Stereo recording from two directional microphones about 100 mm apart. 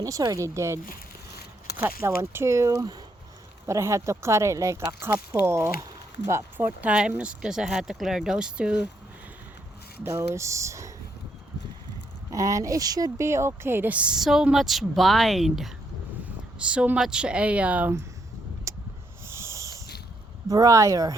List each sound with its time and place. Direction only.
0.0 s speech: 35° right (ahead or behind)
6.8 s speech: 10° right (ahead or behind)
10.0 s speech: 25° right (ahead or behind)
12.3 s speech: 35° right (ahead or behind); by 17.9 s 15° right (ahead or behind)
19.3 s a sound: 30° right (ahead or behind)
20.5 s speech: 35° right (ahead or behind)